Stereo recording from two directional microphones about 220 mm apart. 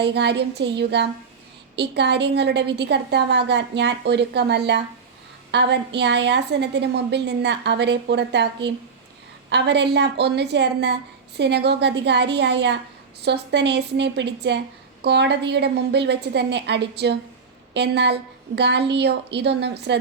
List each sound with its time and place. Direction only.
0.0 s a woman's voice: 50° right (ahead or behind)